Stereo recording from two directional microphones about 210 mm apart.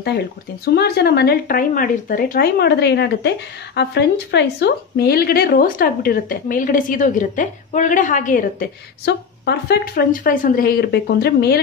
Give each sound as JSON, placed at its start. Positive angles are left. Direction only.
{"t": 0.7, "sound": "speech", "side_deg": 50}